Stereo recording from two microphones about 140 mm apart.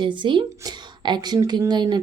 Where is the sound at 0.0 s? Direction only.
35° right (ahead or behind).